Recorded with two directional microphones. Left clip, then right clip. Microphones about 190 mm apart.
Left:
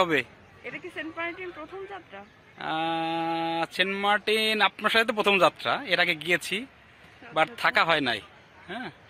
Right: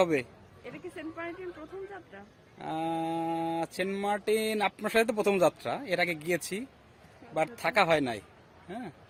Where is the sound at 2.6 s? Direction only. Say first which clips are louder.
Left 4 dB; 5° right (ahead or behind).